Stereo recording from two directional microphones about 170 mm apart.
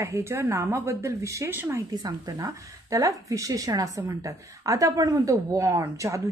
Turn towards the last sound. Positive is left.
turn(degrees=-20)  # may be behind; listen again after turning